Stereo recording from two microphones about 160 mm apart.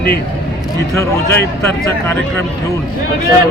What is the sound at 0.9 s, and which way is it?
A man's voice, 15° left (ahead or behind).